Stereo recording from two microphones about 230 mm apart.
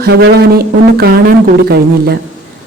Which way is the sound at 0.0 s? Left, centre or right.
Right.